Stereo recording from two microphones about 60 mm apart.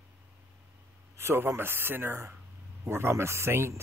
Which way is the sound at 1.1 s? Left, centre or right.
Right.